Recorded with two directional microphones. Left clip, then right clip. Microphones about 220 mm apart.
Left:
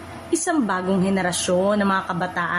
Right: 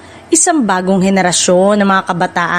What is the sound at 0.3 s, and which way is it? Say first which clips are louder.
A woman's voice: right 10 dB; 40° right (ahead or behind).